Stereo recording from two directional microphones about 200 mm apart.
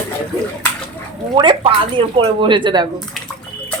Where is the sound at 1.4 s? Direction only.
25° right (ahead or behind).